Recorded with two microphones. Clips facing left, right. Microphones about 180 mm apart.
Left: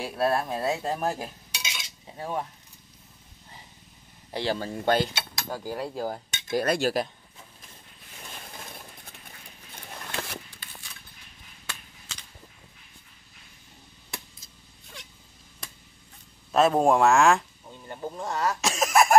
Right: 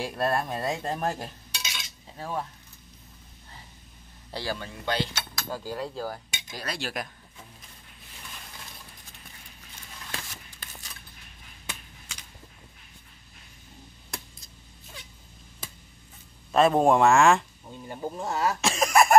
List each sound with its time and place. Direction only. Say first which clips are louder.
0.0 s cutlery: left 1 dB; 5° left (ahead or behind)
4.3 s speech: left 4 dB; 20° left (ahead or behind)
4.6 s speech: left 8 dB; 45° left (ahead or behind)
5.5 s cutlery: left 1 dB; 15° left (ahead or behind)
6.5 s speech: left 11 dB; 50° left (ahead or behind)
9.8 s a sound: left 5 dB; 55° left (ahead or behind)
11.6 s a sound: right 1 dB; 10° right (ahead or behind)
16.5 s speech: even; centre (ahead or behind)
17.8 s speech: right 1 dB; 10° right (ahead or behind)